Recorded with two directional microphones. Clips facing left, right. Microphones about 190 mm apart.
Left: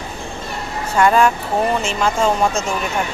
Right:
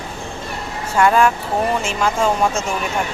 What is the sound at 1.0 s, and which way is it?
Speech, centre (ahead or behind).